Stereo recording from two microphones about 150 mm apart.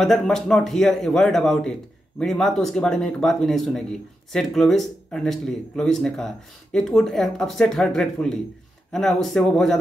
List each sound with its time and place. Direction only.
0.0 s speech: centre (ahead or behind)